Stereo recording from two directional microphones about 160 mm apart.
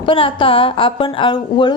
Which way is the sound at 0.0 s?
35° left (ahead or behind).